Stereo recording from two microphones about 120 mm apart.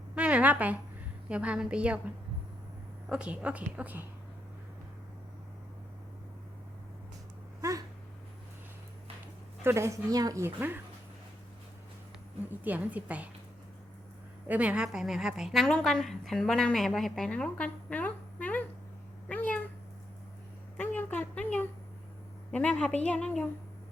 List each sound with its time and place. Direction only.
0.2 s a woman's voice: 10° right (ahead or behind)
3.1 s a woman's voice: 10° right (ahead or behind)
7.6 s cat: 30° right (ahead or behind)
9.6 s a woman's voice: 25° right (ahead or behind)
10.4 s a woman's voice: 15° right (ahead or behind)
12.5 s a woman's voice: 15° right (ahead or behind)
14.4 s a woman's voice: 15° right (ahead or behind); by 18.6 s 15° left (ahead or behind)
19.3 s cat: 10° left (ahead or behind)
20.7 s a sound: 15° left (ahead or behind)
22.5 s a woman's voice: 10° left (ahead or behind)